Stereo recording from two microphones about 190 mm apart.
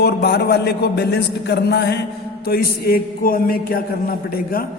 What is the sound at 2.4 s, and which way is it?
A man's voice, 55° left (ahead or behind).